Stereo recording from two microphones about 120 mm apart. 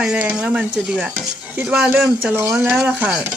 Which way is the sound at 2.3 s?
20° right (ahead or behind).